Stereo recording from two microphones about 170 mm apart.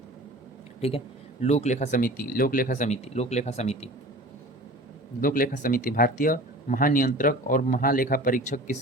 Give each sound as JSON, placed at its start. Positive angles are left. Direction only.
{"t": 0.8, "sound": "speech", "side_deg": 35}
{"t": 5.2, "sound": "speech", "side_deg": 55}